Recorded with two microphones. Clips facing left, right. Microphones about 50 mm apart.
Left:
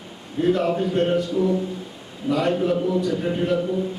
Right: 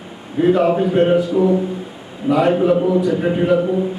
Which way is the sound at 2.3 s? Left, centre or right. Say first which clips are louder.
Right 7 dB; centre.